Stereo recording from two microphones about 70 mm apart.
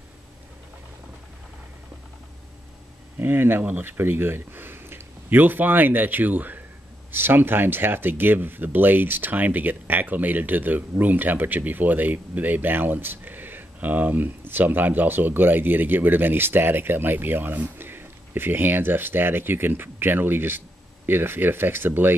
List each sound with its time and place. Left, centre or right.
3.2 s speech: right